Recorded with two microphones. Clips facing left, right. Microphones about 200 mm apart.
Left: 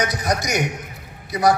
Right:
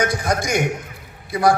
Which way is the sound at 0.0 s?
50° right (ahead or behind).